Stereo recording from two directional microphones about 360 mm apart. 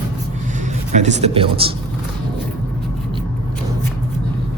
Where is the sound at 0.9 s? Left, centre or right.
Centre.